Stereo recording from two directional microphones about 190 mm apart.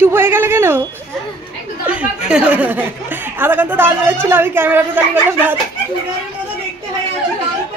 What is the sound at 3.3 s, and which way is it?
A woman's voice, 10° right (ahead or behind).